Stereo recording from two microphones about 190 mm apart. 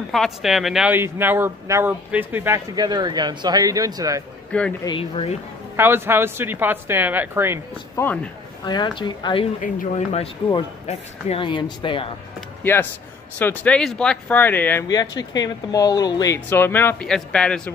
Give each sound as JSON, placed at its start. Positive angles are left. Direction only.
{"t": 0.1, "sound": "speech", "side_deg": 0}
{"t": 4.5, "sound": "speech", "side_deg": 5}
{"t": 4.8, "sound": "speech", "side_deg": 25}
{"t": 5.8, "sound": "speech", "side_deg": -10}
{"t": 7.9, "sound": "speech", "side_deg": 10}
{"t": 8.6, "sound": "speech", "side_deg": 25}
{"t": 9.6, "sound": "speech", "side_deg": 40}
{"t": 13.4, "sound": "speech", "side_deg": 10}